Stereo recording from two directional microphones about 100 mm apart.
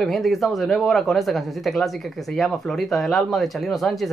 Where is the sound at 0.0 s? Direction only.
Centre (ahead or behind).